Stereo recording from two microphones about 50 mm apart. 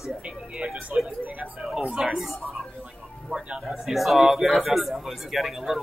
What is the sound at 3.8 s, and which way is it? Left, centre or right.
A man's voice, centre.